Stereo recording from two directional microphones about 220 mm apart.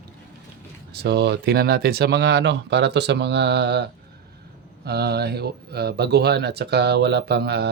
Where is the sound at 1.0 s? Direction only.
50° right (ahead or behind).